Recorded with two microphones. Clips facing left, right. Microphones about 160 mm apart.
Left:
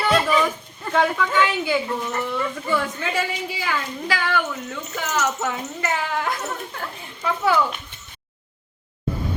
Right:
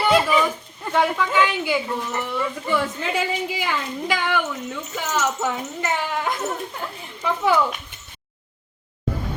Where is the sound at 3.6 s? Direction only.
20° right (ahead or behind).